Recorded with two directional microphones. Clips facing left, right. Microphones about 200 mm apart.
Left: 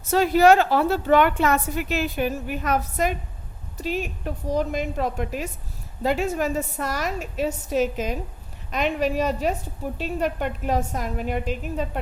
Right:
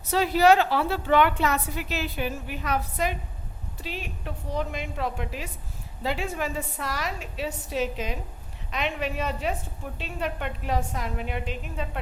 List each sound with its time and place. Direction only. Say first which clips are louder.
0.0 s a woman's voice: left 4 dB; 45° left (ahead or behind)